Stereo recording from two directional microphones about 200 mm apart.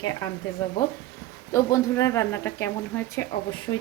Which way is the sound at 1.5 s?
15° left (ahead or behind).